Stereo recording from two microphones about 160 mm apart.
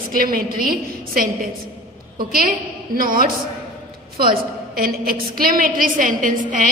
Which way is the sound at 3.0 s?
65° right (ahead or behind).